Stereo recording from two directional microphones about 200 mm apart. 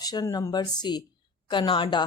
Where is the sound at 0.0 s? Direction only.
20° left (ahead or behind).